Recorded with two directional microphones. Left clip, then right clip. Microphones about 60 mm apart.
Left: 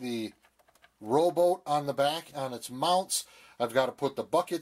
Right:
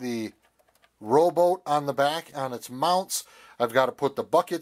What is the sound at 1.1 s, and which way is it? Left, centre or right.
Speech, right.